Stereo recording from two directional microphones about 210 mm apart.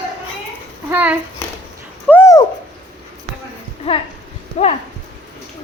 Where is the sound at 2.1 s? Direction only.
15° left (ahead or behind).